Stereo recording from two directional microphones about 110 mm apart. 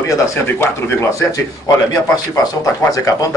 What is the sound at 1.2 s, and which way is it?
Speech, 35° left (ahead or behind).